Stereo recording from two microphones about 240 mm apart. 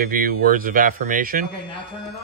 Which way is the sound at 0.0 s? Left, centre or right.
Right.